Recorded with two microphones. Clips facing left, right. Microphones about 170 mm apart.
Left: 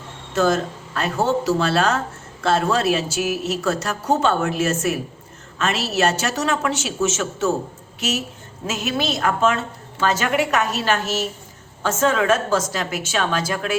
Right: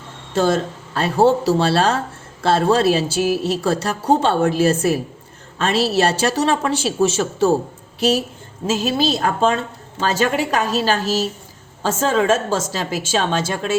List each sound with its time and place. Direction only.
0.3 s a woman's voice: 30° right (ahead or behind)